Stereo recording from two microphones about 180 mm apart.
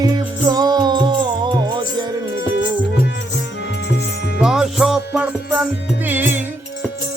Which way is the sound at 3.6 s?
65° left (ahead or behind).